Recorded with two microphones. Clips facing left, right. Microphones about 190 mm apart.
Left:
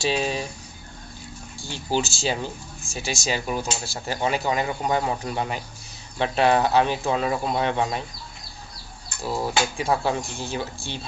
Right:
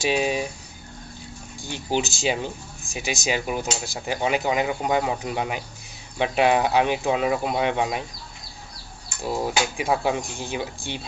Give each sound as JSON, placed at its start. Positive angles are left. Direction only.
{"t": 0.0, "sound": "speech", "side_deg": -10}
{"t": 1.6, "sound": "speech", "side_deg": -15}
{"t": 9.2, "sound": "speech", "side_deg": -15}